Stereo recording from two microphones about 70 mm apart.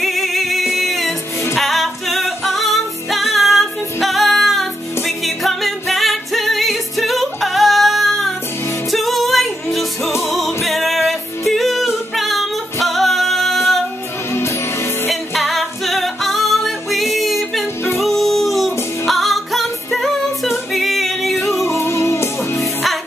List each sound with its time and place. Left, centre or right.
0.0 s music: centre
15.0 s music: centre
21.5 s music: left